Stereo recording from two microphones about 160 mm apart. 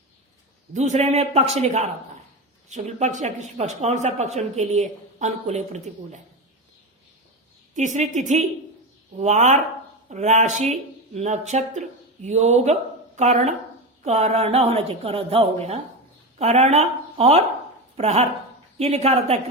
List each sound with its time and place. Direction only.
0.7 s speech: 45° right (ahead or behind)
7.8 s a woman's voice: 50° right (ahead or behind)